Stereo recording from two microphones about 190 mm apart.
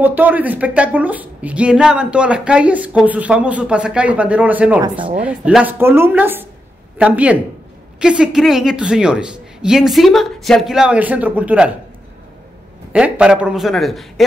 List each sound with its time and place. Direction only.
0.0 s a woman's voice: 10° right (ahead or behind)
4.8 s speech: 25° right (ahead or behind)
5.1 s a woman's voice: 5° right (ahead or behind)
12.9 s a woman's voice: 5° right (ahead or behind)